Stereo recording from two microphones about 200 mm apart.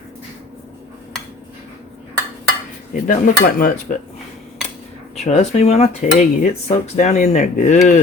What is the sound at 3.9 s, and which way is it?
Cutlery, 35° left (ahead or behind).